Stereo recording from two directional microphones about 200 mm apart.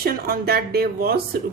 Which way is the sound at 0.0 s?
50° right (ahead or behind).